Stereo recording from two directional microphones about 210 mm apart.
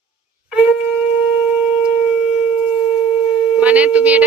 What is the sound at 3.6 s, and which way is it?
Speech, 5° right (ahead or behind).